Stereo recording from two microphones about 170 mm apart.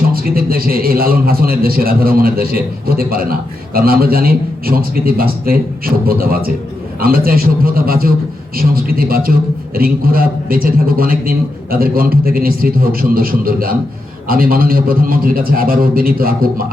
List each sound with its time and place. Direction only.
0.1 s a man's voice: 60° right (ahead or behind)